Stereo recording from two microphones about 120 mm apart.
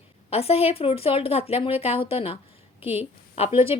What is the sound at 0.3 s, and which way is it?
A woman's voice, 55° left (ahead or behind).